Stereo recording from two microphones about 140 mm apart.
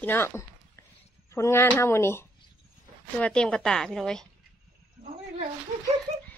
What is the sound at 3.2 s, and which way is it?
A woman's voice, 5° left (ahead or behind).